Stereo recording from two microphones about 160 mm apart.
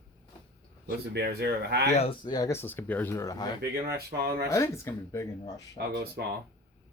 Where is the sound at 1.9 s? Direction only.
40° left (ahead or behind).